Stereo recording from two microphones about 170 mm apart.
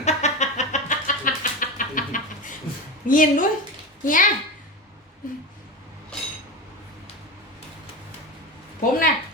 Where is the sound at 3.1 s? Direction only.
50° left (ahead or behind).